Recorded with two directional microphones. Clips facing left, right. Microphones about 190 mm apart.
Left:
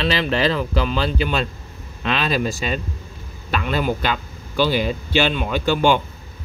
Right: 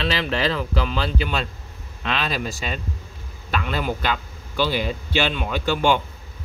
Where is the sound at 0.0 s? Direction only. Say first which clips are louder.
Left 3 dB; 20° left (ahead or behind).